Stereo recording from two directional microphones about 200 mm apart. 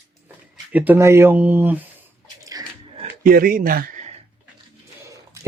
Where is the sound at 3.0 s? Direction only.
45° right (ahead or behind).